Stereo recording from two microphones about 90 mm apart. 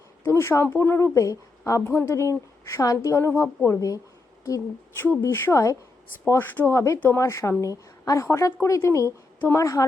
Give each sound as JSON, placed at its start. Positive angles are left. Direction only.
{"t": 0.3, "sound": "a woman's voice", "side_deg": 30}
{"t": 1.8, "sound": "a woman's voice", "side_deg": 25}
{"t": 4.9, "sound": "speech", "side_deg": 20}
{"t": 5.2, "sound": "a woman's voice", "side_deg": 35}